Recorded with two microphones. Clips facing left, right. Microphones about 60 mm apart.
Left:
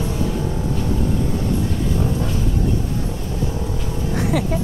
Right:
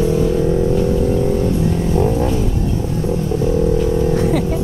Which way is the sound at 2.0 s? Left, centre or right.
Right.